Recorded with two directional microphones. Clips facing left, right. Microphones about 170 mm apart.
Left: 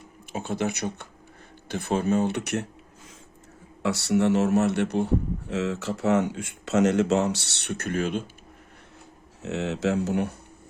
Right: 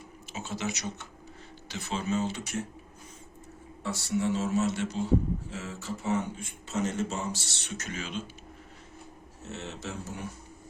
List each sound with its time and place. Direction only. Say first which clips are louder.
0.3 s speech: left 7 dB; 55° left (ahead or behind)
3.8 s a man's voice: left 7 dB; 75° left (ahead or behind); by 8.2 s 55° left (ahead or behind)
9.4 s speech: left 12 dB; 90° left; by 10.3 s 70° left (ahead or behind)